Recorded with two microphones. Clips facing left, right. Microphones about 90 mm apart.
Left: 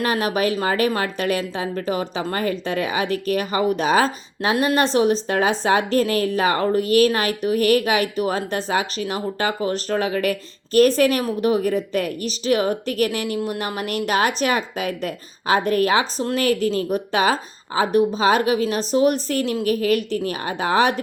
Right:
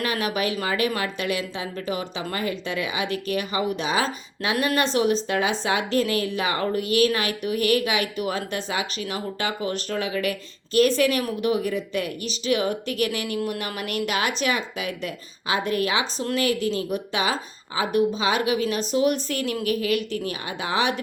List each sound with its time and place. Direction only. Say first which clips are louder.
0.0 s a woman's voice: left 5 dB; 35° left (ahead or behind)
4.5 s a woman's voice: left 4 dB; 30° left (ahead or behind)